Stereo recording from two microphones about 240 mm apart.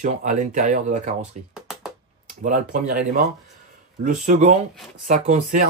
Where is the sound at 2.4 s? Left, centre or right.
Right.